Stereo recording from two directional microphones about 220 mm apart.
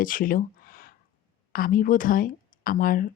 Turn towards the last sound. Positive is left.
turn(degrees=40)  # may be behind; listen again after turning